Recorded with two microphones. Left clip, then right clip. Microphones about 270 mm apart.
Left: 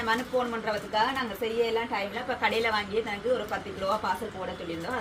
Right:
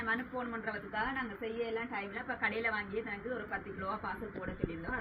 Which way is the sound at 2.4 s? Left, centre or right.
Centre.